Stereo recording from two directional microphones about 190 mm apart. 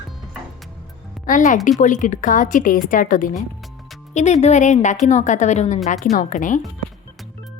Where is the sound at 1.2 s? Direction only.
45° left (ahead or behind).